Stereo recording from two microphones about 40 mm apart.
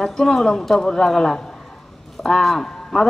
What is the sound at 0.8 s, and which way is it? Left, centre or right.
Speech, centre.